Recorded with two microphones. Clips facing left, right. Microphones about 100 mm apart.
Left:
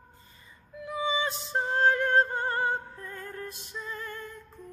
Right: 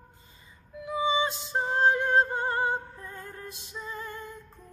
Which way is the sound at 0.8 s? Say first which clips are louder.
Right 3 dB; 20° right (ahead or behind).